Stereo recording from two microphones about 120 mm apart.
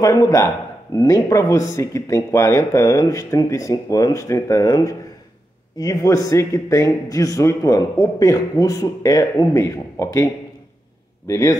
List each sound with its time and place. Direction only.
0.0 s a man's voice: 25° left (ahead or behind)
11.2 s a man's voice: 25° left (ahead or behind)